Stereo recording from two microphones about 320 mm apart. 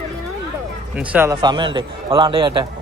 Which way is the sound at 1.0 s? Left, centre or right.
Centre.